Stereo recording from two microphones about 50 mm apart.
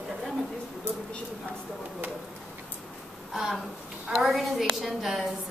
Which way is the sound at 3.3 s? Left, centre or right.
Centre.